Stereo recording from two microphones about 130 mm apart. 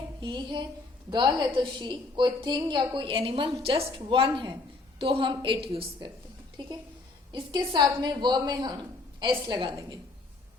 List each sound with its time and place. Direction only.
0.2 s a woman's voice: 35° right (ahead or behind)